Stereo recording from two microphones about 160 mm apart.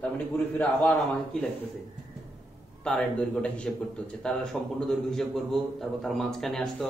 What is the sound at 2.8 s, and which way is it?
A man's voice, 5° left (ahead or behind).